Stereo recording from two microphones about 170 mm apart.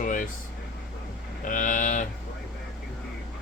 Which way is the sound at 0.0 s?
50° left (ahead or behind).